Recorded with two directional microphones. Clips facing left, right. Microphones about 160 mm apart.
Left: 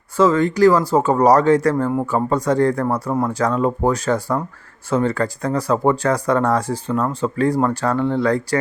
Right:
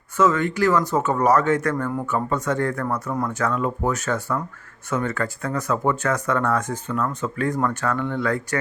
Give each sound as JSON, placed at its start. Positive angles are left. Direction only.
{"t": 0.2, "sound": "speech", "side_deg": 35}